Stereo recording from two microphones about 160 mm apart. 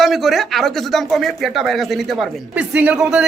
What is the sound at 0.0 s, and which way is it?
Speech, centre (ahead or behind).